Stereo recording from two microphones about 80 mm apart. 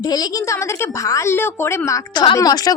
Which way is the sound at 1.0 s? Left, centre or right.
Left.